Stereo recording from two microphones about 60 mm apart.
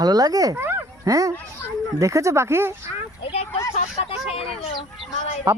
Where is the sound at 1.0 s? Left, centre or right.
Right.